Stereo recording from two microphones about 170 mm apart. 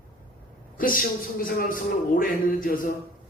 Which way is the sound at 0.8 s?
55° left (ahead or behind).